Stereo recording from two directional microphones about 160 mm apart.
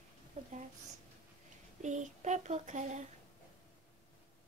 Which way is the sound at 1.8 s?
50° right (ahead or behind).